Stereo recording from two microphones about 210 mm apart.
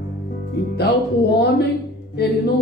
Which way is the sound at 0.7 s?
50° left (ahead or behind).